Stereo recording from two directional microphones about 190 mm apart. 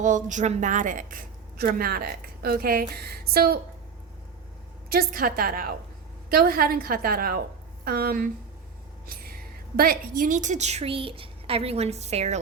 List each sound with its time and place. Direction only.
0.0 s a woman's voice: 40° right (ahead or behind)
4.9 s a woman's voice: 50° right (ahead or behind); by 12.4 s 35° right (ahead or behind)